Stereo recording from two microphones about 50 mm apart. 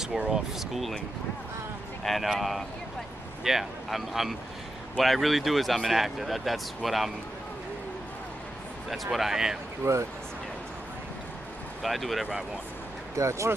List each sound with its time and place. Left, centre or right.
0.7 s speech: centre
2.0 s speech: centre
8.9 s speech: centre
9.8 s speech: right
11.8 s speech: centre
13.1 s speech: right